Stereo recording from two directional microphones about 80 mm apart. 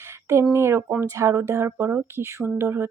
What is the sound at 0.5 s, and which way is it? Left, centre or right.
Speech, right.